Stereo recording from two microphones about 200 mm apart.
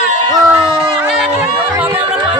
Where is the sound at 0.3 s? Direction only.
20° right (ahead or behind).